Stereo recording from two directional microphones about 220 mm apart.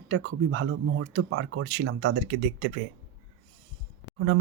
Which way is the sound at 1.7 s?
50° right (ahead or behind).